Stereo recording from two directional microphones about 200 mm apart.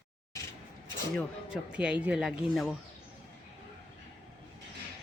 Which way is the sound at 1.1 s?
5° right (ahead or behind).